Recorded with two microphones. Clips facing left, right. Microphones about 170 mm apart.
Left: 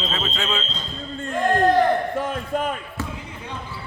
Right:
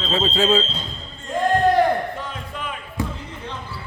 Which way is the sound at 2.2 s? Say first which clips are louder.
Left 7 dB; 45° left (ahead or behind).